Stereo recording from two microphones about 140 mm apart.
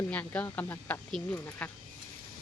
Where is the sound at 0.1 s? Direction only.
10° left (ahead or behind).